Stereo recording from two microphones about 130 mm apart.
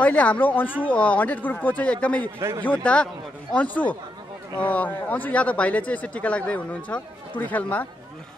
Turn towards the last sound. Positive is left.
turn(degrees=10)  # may be behind; listen again after turning